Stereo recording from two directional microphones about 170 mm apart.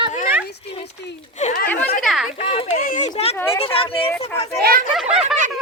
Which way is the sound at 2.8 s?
50° left (ahead or behind).